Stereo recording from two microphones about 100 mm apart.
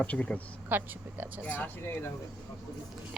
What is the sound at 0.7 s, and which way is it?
Speech, 20° right (ahead or behind).